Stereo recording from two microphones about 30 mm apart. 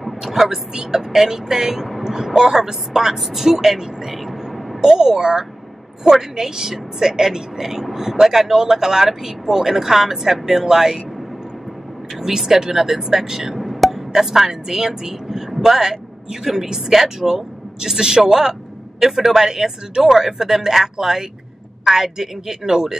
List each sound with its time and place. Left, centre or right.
0.0 s vehicle: centre
1.1 s speech: centre
4.8 s speech: right
6.4 s speech: centre
12.2 s speech: centre
13.6 s music: centre
14.1 s a man's voice: centre